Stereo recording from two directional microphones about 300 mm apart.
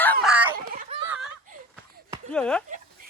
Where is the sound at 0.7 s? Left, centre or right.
Right.